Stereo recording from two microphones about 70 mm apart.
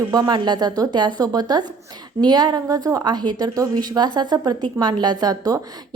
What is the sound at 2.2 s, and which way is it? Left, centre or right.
A woman's voice, right.